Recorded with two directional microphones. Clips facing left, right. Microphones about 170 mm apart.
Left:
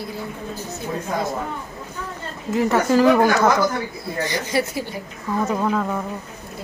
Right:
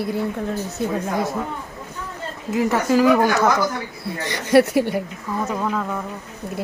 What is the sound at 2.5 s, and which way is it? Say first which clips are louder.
Speech: left 1 dB; 10° right (ahead or behind).